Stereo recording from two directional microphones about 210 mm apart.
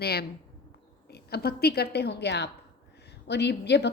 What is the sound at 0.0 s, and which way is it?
A woman's voice, 50° left (ahead or behind).